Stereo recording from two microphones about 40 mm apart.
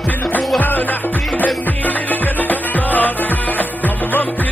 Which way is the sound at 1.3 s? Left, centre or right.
Left.